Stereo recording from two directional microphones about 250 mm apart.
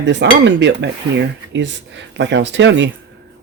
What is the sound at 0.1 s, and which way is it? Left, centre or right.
Speech, right.